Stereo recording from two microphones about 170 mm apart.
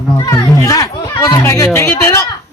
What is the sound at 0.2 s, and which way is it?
Speech, 20° left (ahead or behind).